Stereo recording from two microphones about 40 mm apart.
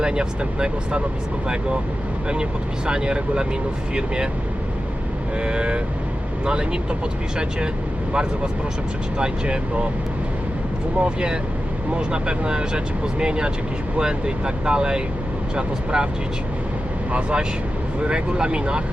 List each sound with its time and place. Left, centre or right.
0.0 s speech: right
2.3 s speech: right
5.4 s speech: right
9.1 s speech: right
11.0 s speech: right
17.1 s speech: right